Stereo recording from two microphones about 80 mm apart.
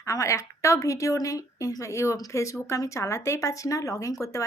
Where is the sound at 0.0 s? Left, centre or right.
Left.